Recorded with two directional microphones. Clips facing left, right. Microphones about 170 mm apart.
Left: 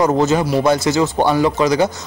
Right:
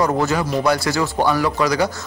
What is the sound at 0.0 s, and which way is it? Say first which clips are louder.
Speech: left 4 dB; 20° left (ahead or behind).